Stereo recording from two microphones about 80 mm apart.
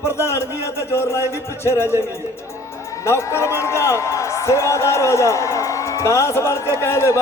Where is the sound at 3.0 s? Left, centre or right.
Left.